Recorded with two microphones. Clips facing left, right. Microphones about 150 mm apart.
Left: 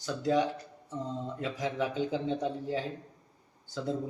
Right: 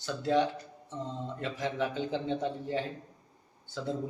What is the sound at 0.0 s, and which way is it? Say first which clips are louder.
A man's voice: even; 5° left (ahead or behind).